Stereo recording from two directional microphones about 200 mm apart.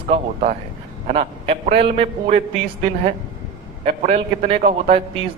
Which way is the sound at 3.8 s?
35° right (ahead or behind).